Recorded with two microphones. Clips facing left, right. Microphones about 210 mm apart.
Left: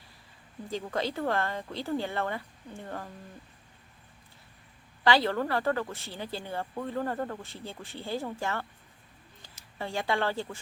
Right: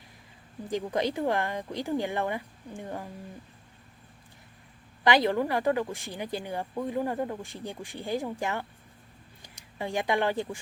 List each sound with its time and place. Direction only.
0.7 s speech: 15° right (ahead or behind)
5.0 s speech: 15° right (ahead or behind)
9.7 s speech: 15° right (ahead or behind)